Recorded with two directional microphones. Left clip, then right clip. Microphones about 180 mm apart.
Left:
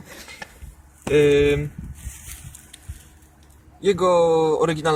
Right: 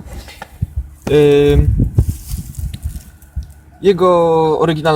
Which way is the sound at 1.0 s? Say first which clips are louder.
Right 6 dB; 25° right (ahead or behind).